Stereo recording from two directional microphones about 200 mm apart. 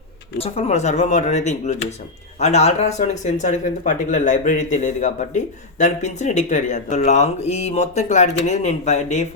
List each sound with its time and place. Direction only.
0.3 s speech: 30° left (ahead or behind)